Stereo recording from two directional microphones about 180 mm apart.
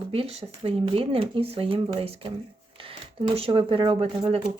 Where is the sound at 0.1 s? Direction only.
30° right (ahead or behind).